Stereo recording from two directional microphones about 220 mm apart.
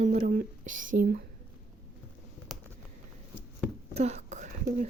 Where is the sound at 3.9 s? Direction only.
30° right (ahead or behind).